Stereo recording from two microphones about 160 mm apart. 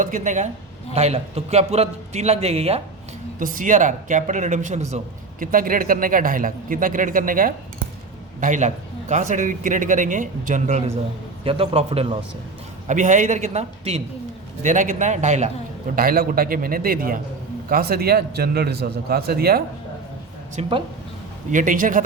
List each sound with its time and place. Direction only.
0.0 s a man's voice: 50° right (ahead or behind)
3.3 s a man's voice: 60° right (ahead or behind)
5.4 s a man's voice: 60° right (ahead or behind); by 12.0 s 35° right (ahead or behind)
12.9 s a man's voice: 50° right (ahead or behind)
14.6 s a man's voice: 50° right (ahead or behind)
16.0 s a man's voice: 65° right (ahead or behind)
20.6 s a man's voice: 30° right (ahead or behind)
21.5 s a man's voice: 55° right (ahead or behind)